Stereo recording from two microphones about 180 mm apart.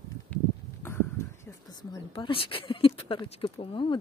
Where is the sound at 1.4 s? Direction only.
20° left (ahead or behind).